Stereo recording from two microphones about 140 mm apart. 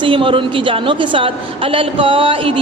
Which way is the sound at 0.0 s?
40° right (ahead or behind).